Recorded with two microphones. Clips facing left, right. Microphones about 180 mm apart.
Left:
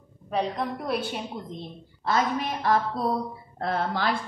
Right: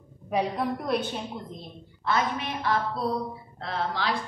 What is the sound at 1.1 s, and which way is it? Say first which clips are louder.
Speech: left 1 dB; 20° left (ahead or behind).